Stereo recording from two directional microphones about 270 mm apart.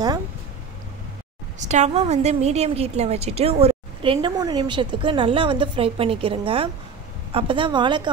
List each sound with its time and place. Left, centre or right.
1.6 s a woman's voice: right